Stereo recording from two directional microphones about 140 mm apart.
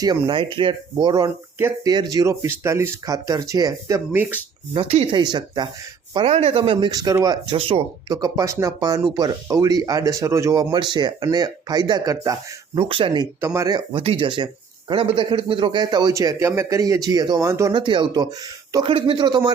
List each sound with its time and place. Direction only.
0.0 s speech: 35° right (ahead or behind)
1.5 s speech: 15° right (ahead or behind)
4.7 s speech: 45° right (ahead or behind)
5.1 s speech: 30° right (ahead or behind)
6.1 s speech: 45° right (ahead or behind); by 7.3 s 30° right (ahead or behind)
7.5 s speech: 40° right (ahead or behind)
8.1 s speech: 25° right (ahead or behind)
12.7 s speech: 40° right (ahead or behind)
13.4 s speech: 20° right (ahead or behind)
14.0 s speech: 40° right (ahead or behind); by 17.7 s 20° right (ahead or behind)
17.7 s speech: 35° right (ahead or behind)